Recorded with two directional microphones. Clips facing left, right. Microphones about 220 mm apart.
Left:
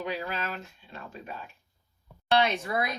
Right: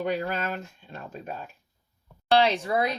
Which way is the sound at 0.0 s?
50° right (ahead or behind).